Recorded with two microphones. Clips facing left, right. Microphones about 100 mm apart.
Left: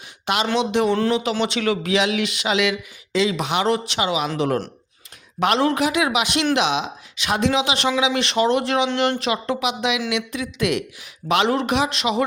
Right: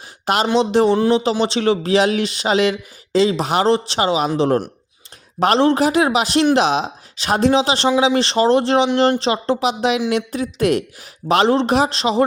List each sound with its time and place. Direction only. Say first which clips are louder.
0.5 s speech: right 5 dB; 35° right (ahead or behind)